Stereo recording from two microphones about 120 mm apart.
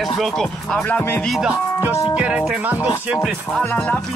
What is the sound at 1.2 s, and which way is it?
Music, centre (ahead or behind).